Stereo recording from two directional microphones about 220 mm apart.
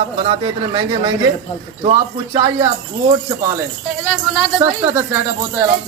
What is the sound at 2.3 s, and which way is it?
Speech, 15° right (ahead or behind).